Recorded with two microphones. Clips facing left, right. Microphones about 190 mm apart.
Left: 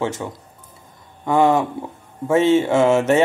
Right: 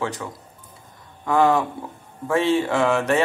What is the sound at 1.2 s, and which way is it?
Speech, 20° left (ahead or behind).